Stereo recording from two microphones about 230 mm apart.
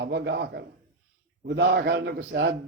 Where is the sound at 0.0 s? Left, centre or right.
Right.